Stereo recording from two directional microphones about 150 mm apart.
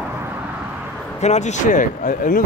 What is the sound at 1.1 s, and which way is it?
Speech, 50° left (ahead or behind).